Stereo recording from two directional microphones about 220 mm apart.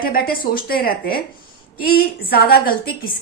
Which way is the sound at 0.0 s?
40° left (ahead or behind).